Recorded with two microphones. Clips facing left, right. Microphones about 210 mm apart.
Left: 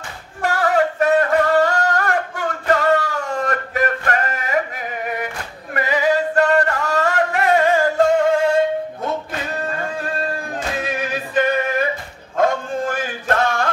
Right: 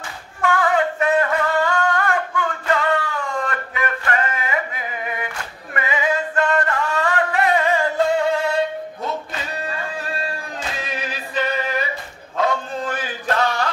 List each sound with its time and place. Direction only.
0.4 s singing: 40° left (ahead or behind)
5.8 s music: 40° left (ahead or behind); by 11.9 s 55° left (ahead or behind)
12.4 s a sound: 50° left (ahead or behind)